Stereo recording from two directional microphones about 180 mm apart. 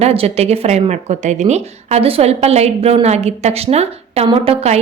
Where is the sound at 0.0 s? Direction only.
35° right (ahead or behind).